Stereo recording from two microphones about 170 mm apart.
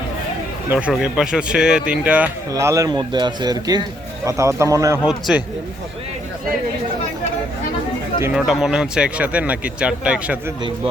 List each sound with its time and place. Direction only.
0.7 s speech: 5° right (ahead or behind)
5.0 s speech: 5° right (ahead or behind)
8.2 s speech: 5° right (ahead or behind)